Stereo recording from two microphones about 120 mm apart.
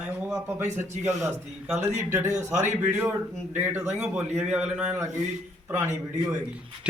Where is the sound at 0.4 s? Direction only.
20° right (ahead or behind).